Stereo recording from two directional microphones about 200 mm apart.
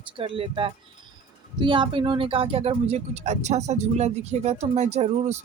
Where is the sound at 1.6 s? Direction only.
25° right (ahead or behind).